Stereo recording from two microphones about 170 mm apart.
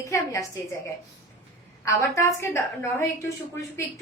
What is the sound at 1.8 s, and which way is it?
A woman's voice, 15° left (ahead or behind).